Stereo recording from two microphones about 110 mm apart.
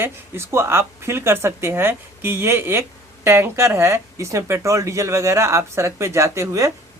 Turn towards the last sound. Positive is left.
turn(degrees=-30)  # may be behind; listen again after turning